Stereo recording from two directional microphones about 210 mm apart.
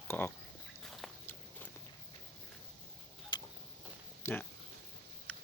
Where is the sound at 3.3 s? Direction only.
20° left (ahead or behind).